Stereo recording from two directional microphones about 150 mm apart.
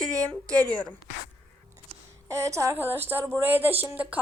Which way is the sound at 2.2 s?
20° right (ahead or behind).